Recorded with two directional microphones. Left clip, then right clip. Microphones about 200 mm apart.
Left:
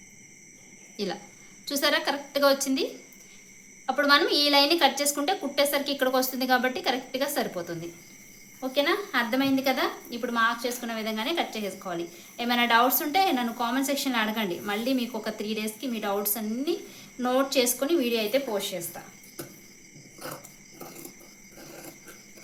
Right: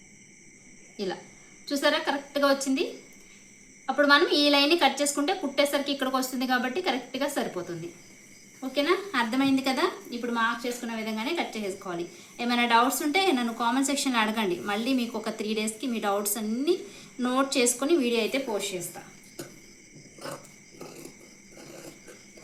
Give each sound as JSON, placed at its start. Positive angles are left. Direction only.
{"t": 1.6, "sound": "a woman's voice", "side_deg": 30}
{"t": 3.8, "sound": "a woman's voice", "side_deg": 30}